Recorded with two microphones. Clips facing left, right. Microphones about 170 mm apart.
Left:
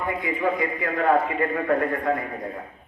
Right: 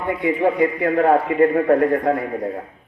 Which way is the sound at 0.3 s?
35° right (ahead or behind).